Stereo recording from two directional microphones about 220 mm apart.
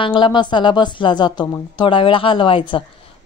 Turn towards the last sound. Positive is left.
turn(degrees=25)  # may be behind; listen again after turning